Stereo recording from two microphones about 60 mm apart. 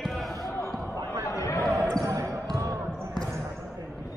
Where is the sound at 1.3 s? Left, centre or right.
Left.